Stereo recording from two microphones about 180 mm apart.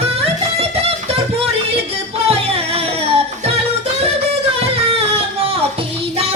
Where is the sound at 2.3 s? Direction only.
35° right (ahead or behind).